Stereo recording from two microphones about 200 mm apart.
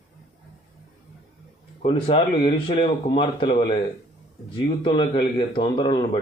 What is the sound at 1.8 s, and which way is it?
Speech, 30° left (ahead or behind).